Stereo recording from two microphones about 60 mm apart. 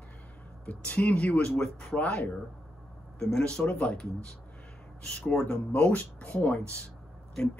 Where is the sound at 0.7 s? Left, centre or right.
Left.